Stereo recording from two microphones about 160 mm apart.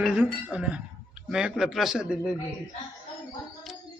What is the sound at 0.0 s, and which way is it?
A man's voice, 5° right (ahead or behind).